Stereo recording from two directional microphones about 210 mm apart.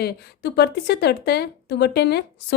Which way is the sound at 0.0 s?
50° left (ahead or behind).